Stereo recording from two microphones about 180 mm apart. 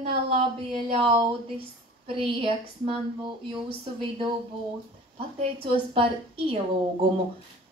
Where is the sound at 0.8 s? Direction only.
30° right (ahead or behind).